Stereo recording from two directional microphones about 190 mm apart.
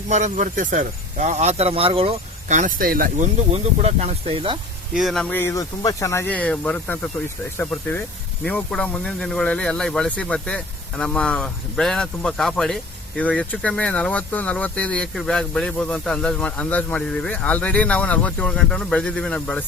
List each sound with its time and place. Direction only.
0.1 s speech: 40° right (ahead or behind)
3.5 s speech: 35° right (ahead or behind)
4.9 s speech: centre (ahead or behind)